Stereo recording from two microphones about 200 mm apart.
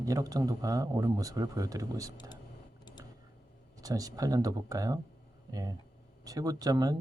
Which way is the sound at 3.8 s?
15° right (ahead or behind).